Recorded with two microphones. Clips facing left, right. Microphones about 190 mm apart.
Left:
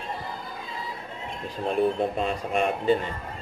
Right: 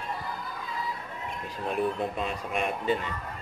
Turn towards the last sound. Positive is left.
turn(degrees=35)  # may be behind; listen again after turning